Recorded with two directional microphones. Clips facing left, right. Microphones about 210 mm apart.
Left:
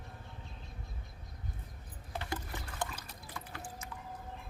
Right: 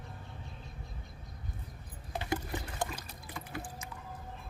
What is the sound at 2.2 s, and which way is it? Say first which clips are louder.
Rowboat: right 7 dB; 15° right (ahead or behind).